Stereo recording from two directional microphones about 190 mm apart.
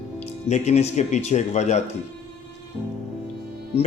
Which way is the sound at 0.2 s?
35° left (ahead or behind).